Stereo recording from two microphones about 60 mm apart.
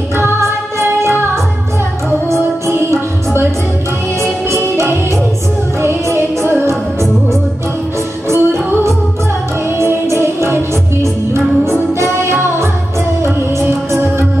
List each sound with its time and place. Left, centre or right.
0.2 s music: right
2.6 s music: right
8.3 s music: right